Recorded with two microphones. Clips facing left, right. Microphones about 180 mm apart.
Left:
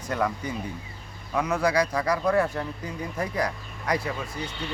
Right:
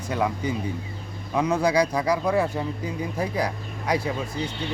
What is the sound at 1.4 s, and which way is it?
Speech, 15° right (ahead or behind).